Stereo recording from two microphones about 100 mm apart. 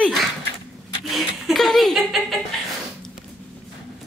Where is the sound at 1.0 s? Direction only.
Centre (ahead or behind).